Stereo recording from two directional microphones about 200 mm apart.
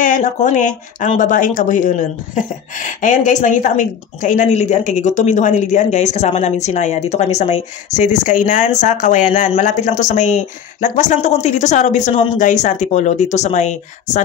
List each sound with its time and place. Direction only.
0.0 s speech: 40° left (ahead or behind)